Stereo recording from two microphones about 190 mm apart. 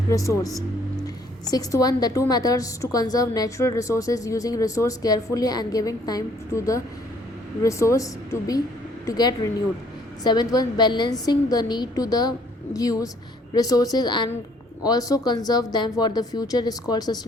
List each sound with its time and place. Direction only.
0.1 s a woman's voice: 15° left (ahead or behind)